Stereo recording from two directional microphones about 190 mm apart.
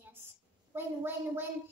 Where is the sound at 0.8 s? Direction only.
10° right (ahead or behind).